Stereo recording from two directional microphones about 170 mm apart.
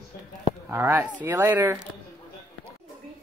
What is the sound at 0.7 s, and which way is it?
Speech, 15° right (ahead or behind).